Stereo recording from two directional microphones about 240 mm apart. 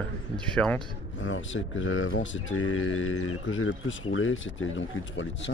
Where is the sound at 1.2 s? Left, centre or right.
Left.